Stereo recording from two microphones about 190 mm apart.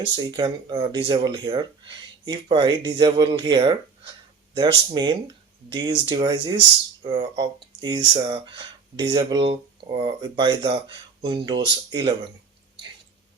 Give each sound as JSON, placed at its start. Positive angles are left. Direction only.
{"t": 0.2, "sound": "speech", "side_deg": -25}